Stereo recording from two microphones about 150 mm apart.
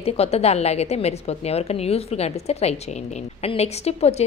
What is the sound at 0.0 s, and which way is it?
A woman's voice, 45° left (ahead or behind).